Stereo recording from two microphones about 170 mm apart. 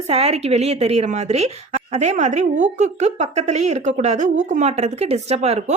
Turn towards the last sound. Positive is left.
turn(degrees=-40)  # may be behind; listen again after turning